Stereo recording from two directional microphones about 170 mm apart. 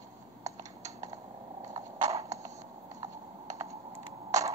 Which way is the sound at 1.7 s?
20° right (ahead or behind).